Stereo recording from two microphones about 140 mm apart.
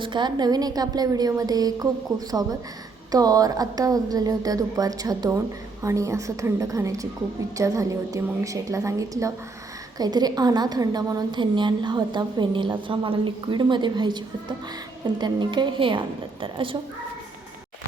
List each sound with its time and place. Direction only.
0.0 s a woman's voice: 35° right (ahead or behind)